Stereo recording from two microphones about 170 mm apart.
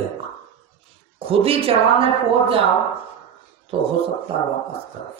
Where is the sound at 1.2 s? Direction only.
35° right (ahead or behind).